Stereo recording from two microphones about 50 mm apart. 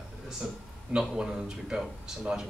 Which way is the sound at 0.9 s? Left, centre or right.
Centre.